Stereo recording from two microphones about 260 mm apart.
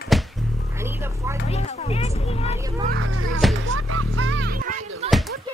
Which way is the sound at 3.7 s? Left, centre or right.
Right.